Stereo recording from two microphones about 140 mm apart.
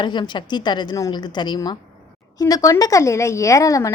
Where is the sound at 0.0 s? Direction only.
35° left (ahead or behind).